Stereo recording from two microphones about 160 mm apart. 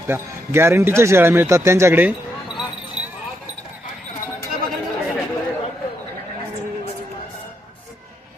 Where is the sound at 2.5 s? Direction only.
5° right (ahead or behind).